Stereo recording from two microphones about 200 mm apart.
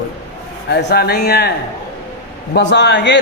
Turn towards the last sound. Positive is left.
turn(degrees=60)  # may be behind; listen again after turning